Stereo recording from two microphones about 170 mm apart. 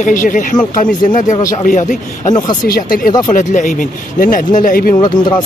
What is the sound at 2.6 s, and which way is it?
Speech, 60° left (ahead or behind).